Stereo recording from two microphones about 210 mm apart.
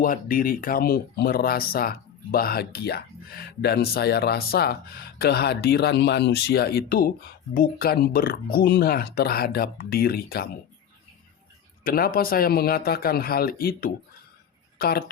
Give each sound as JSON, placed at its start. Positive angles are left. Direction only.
{"t": 0.0, "sound": "speech", "side_deg": 40}
{"t": 11.8, "sound": "speech", "side_deg": 45}